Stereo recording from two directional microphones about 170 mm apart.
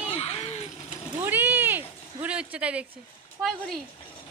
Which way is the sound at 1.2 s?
10° right (ahead or behind).